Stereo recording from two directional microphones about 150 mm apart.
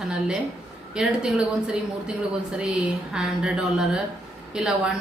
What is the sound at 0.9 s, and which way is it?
Speech, 5° right (ahead or behind).